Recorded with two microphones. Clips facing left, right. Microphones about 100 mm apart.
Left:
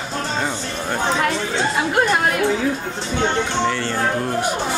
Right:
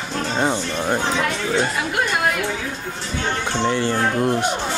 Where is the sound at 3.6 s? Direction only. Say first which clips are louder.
Right 1 dB; 15° right (ahead or behind).